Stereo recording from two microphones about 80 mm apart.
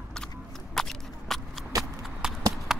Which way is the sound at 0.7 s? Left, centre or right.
Centre.